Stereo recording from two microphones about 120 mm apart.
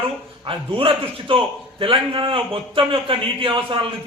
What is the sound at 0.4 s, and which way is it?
A man's voice, 50° right (ahead or behind).